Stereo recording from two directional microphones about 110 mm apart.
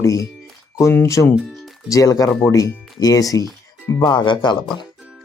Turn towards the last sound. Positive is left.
turn(degrees=45)  # may be behind; listen again after turning